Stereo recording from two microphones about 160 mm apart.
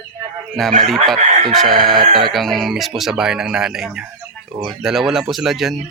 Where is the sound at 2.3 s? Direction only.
Centre (ahead or behind).